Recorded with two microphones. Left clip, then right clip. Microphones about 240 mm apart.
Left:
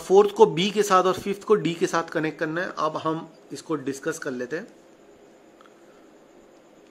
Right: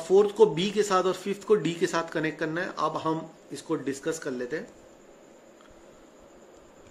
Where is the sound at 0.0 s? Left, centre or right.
Centre.